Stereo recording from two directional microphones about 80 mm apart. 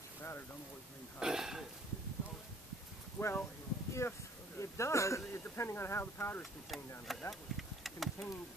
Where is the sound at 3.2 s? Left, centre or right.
Left.